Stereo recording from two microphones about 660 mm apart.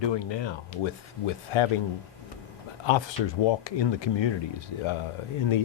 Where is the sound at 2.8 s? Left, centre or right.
Left.